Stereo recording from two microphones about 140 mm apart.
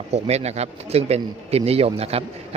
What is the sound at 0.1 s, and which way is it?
A man's voice, 50° right (ahead or behind).